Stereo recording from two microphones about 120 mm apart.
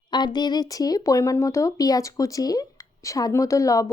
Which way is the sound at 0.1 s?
40° left (ahead or behind).